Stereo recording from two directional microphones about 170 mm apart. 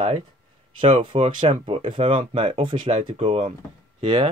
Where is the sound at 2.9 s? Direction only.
40° right (ahead or behind).